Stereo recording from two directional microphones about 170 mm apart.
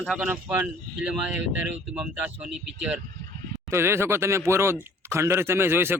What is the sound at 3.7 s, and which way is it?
Speech, 15° right (ahead or behind).